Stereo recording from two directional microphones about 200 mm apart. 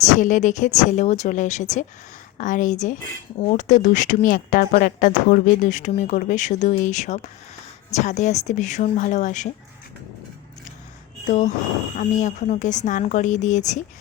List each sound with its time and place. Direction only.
0.0 s speech: 40° left (ahead or behind)
11.3 s speech: 40° left (ahead or behind)